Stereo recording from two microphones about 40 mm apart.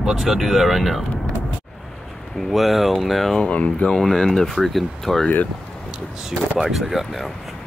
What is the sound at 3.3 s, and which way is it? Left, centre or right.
Speech, left.